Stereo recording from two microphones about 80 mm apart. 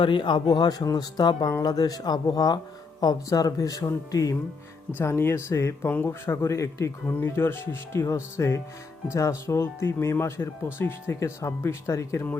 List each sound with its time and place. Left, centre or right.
0.0 s speech: left
4.9 s speech: left
7.0 s speech: left